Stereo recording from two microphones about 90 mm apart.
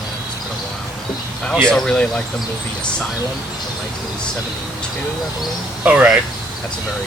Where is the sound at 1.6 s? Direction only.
10° left (ahead or behind).